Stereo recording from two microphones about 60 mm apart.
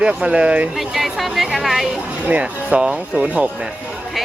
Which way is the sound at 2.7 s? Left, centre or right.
Right.